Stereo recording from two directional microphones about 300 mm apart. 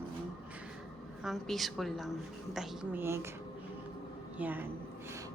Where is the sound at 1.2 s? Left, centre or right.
Centre.